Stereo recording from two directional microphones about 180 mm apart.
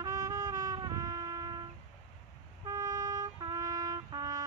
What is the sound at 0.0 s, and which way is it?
Music, 20° right (ahead or behind).